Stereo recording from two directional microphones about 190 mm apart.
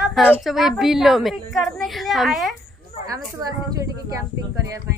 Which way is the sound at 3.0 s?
20° right (ahead or behind).